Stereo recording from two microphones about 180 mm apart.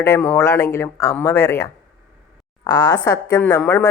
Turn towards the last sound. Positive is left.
turn(degrees=10)  # may be behind; listen again after turning